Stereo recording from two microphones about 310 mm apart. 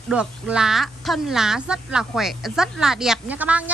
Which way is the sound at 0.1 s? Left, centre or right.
Centre.